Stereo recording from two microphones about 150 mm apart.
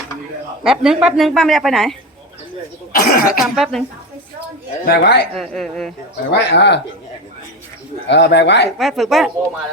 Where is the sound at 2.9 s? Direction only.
70° left (ahead or behind).